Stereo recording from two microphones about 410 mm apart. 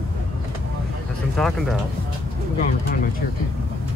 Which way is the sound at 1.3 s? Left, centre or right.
Centre.